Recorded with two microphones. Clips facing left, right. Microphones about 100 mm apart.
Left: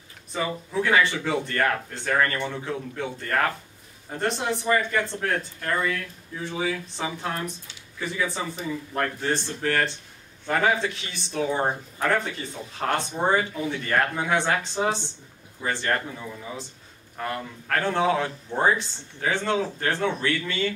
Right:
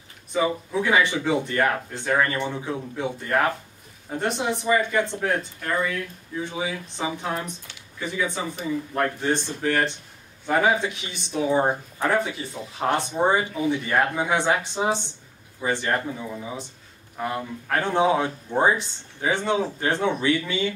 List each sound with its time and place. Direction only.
0.3 s speech: 15° right (ahead or behind)
9.0 s speech: 15° right (ahead or behind)